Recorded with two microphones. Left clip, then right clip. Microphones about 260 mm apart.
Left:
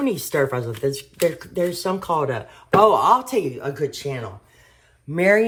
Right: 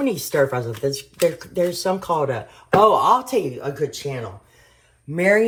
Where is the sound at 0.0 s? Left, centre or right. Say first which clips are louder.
Right 2 dB; left.